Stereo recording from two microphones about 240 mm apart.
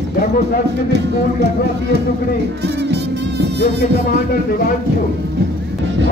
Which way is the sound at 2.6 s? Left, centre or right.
Right.